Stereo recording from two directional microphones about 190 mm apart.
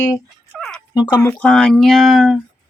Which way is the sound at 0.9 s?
20° left (ahead or behind).